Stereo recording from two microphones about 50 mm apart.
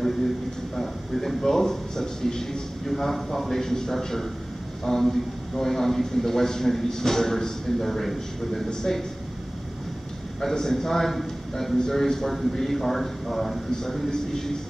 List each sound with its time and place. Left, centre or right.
0.7 s a man's voice: centre
10.4 s a man's voice: centre